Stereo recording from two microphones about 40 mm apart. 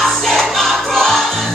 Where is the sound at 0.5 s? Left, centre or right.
Centre.